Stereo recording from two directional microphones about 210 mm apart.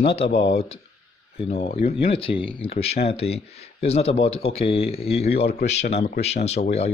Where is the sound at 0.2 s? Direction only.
50° left (ahead or behind).